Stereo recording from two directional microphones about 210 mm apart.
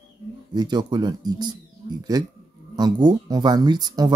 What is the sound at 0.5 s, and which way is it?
Speech, 20° right (ahead or behind).